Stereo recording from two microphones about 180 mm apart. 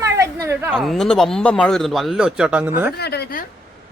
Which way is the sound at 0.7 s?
Centre (ahead or behind).